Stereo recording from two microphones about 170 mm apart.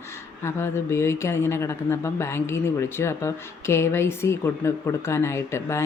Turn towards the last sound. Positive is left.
turn(degrees=15)  # may be behind; listen again after turning